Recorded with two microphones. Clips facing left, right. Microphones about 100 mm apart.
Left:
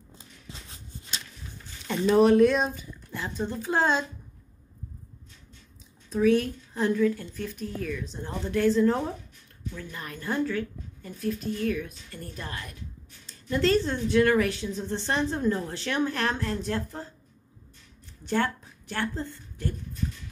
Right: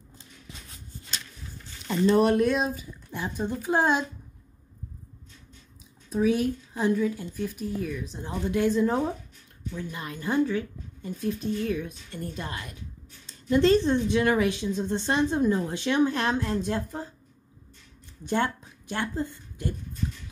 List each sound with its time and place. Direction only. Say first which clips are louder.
1.9 s speech: left 1 dB; centre (ahead or behind)
3.1 s speech: right 1 dB; 15° right (ahead or behind)
6.0 s speech: left 1 dB; 15° right (ahead or behind)
18.2 s a woman's voice: right 1 dB; 20° right (ahead or behind)